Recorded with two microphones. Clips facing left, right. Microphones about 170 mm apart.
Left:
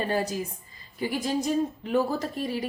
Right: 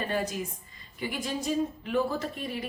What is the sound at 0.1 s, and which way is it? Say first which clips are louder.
A woman's voice: left 3 dB; 35° left (ahead or behind).